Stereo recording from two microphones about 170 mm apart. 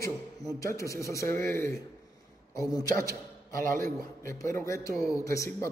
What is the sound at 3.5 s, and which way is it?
Speech, 55° right (ahead or behind).